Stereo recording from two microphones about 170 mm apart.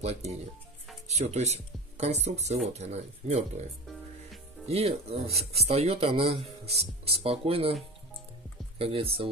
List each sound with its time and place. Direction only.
0.0 s speech: 40° right (ahead or behind)
3.8 s music: centre (ahead or behind)
4.6 s speech: 35° right (ahead or behind)
8.7 s speech: 35° right (ahead or behind)